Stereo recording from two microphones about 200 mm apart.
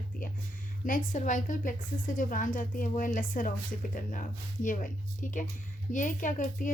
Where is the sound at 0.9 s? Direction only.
40° left (ahead or behind).